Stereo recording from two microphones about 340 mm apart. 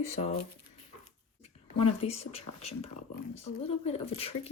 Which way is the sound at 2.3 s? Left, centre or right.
Centre.